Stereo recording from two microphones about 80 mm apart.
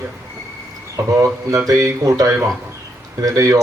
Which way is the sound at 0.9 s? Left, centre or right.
Right.